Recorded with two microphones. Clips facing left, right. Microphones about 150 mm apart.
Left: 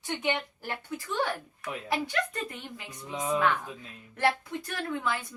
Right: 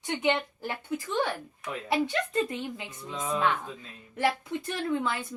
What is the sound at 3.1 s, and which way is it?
Speech, 20° left (ahead or behind).